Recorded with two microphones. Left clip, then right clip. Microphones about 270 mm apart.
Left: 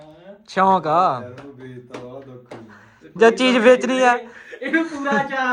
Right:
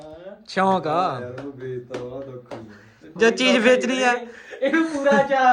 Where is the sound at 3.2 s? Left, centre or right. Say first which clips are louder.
Left 3 dB; centre.